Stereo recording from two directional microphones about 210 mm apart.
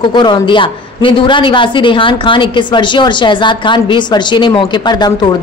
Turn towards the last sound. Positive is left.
turn(degrees=20)  # may be behind; listen again after turning